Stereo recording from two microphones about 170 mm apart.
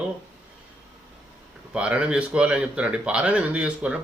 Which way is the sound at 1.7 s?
5° right (ahead or behind).